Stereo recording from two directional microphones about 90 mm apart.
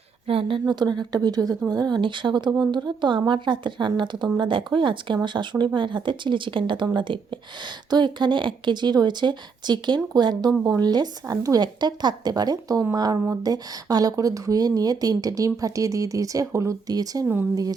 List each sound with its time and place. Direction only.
0.3 s a woman's voice: 80° right
0.7 s speech: 55° right (ahead or behind)
2.0 s speech: 65° right (ahead or behind)
7.9 s speech: 55° right (ahead or behind)